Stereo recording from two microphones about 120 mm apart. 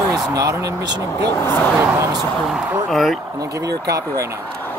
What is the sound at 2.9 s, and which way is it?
Speech, centre (ahead or behind).